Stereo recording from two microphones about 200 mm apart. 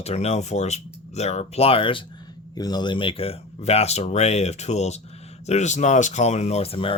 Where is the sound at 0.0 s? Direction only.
30° left (ahead or behind).